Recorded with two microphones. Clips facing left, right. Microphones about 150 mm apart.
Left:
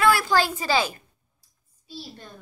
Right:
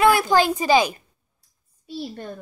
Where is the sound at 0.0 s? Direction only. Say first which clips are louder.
Right 4 dB; 20° right (ahead or behind).